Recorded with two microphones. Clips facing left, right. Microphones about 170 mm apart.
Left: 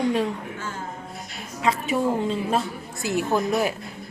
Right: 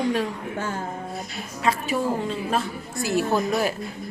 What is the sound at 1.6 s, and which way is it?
Speech, 20° left (ahead or behind).